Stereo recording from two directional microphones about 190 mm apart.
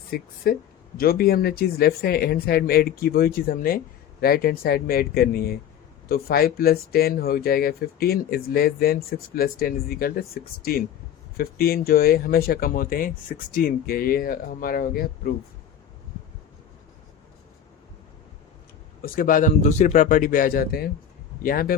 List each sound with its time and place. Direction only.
0.1 s speech: 50° left (ahead or behind)
19.0 s speech: 45° left (ahead or behind)